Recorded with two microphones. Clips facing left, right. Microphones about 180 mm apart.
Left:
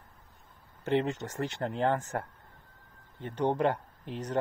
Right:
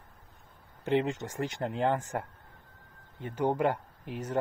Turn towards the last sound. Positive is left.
turn(degrees=-10)  # may be behind; listen again after turning